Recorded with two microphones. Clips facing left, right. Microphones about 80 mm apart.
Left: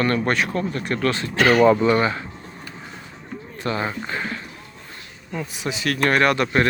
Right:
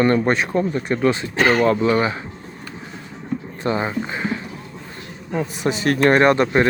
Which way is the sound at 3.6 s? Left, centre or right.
Right.